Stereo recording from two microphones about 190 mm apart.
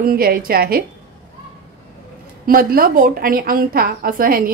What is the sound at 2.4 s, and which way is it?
A woman's voice, 50° right (ahead or behind).